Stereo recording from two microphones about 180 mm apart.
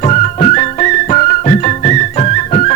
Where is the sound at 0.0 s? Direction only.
40° left (ahead or behind).